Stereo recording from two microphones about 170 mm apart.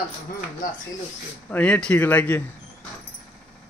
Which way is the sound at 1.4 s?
10° left (ahead or behind).